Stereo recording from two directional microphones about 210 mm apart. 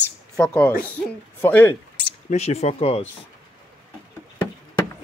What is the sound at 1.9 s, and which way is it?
Speech, 30° left (ahead or behind).